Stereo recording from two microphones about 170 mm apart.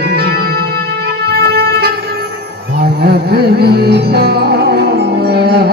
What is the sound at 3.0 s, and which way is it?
Music, 65° right (ahead or behind).